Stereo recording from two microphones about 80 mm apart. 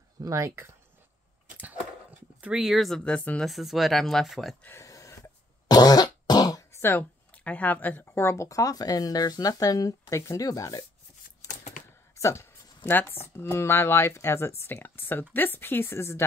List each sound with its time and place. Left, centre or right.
0.2 s speech: right
2.4 s speech: centre
3.0 s speech: centre
3.4 s speech: centre
4.6 s a sound: left
5.7 s cough: left
6.7 s speech: left
12.2 s a sound: left
12.9 s speech: left